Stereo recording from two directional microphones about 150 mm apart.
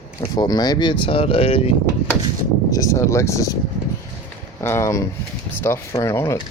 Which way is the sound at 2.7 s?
20° left (ahead or behind).